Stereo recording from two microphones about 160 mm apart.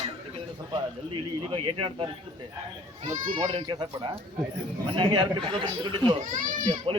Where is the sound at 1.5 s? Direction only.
30° right (ahead or behind).